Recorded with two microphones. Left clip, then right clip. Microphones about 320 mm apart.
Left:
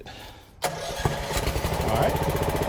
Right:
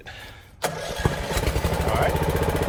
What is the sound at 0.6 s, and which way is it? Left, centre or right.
Vehicle, left.